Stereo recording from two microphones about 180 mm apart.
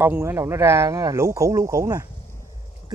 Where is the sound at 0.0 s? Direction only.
10° right (ahead or behind).